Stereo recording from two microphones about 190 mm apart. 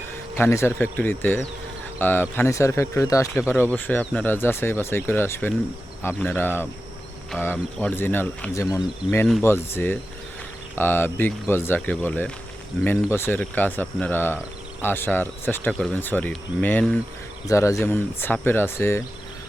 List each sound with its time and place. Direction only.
0.3 s speech: 15° left (ahead or behind)